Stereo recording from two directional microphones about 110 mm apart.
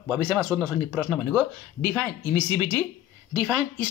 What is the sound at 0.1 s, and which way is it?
Speech, 5° left (ahead or behind).